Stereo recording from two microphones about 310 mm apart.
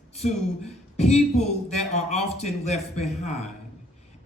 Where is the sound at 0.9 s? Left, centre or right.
Left.